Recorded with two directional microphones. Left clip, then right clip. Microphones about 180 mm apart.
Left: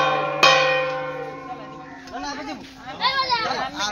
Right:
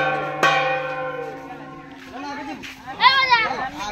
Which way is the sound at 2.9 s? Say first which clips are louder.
Right 6 dB; 35° right (ahead or behind).